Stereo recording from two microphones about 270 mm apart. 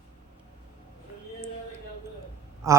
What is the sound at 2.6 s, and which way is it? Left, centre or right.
Speech, centre.